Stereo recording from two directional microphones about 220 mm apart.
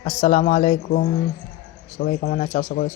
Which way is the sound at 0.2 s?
35° left (ahead or behind).